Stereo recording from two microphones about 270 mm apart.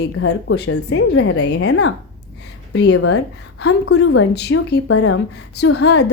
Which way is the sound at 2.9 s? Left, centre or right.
Left.